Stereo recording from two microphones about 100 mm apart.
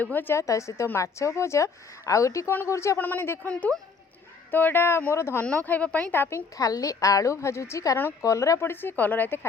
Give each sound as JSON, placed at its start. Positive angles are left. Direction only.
{"t": 0.0, "sound": "a woman's voice", "side_deg": 20}
{"t": 3.5, "sound": "speech", "side_deg": 10}
{"t": 4.5, "sound": "speech", "side_deg": 20}
{"t": 6.6, "sound": "a woman's voice", "side_deg": 35}